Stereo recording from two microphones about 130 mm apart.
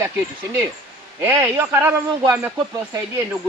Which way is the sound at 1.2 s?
20° right (ahead or behind).